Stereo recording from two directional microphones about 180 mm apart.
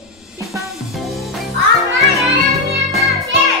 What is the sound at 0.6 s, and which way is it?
Music, centre (ahead or behind).